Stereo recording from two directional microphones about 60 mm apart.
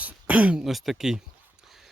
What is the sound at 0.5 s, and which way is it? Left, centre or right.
Speech, centre.